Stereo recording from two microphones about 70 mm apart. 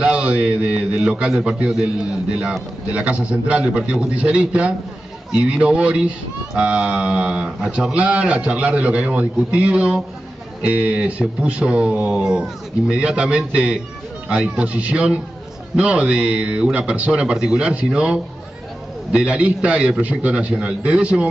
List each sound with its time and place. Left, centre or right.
0.0 s speech: centre
2.9 s speech: centre